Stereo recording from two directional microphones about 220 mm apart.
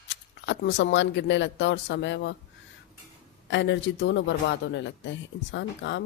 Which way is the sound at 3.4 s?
55° left (ahead or behind).